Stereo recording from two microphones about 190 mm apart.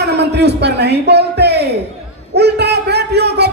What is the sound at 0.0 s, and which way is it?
Speech, 60° right (ahead or behind).